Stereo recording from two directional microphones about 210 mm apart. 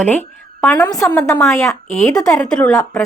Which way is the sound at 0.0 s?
10° left (ahead or behind).